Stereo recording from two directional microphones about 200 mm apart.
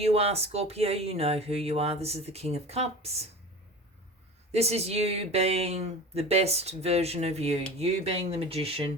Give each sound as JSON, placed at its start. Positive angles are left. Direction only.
{"t": 0.0, "sound": "speech", "side_deg": -30}
{"t": 4.5, "sound": "speech", "side_deg": -30}